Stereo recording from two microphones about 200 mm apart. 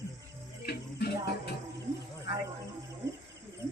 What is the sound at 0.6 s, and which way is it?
Music, 55° left (ahead or behind).